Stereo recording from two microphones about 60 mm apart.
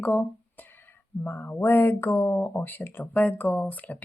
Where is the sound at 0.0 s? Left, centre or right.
Left.